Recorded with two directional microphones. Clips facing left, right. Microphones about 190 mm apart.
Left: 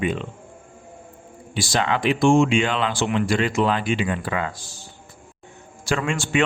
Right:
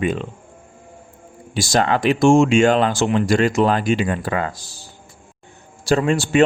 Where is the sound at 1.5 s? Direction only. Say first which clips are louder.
Right 4 dB; 40° right (ahead or behind).